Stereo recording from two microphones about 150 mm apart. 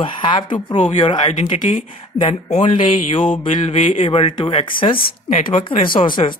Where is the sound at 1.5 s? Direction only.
60° left (ahead or behind).